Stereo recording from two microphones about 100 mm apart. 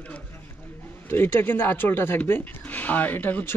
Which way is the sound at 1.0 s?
25° left (ahead or behind).